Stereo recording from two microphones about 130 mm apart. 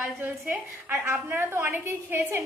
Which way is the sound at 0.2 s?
15° right (ahead or behind).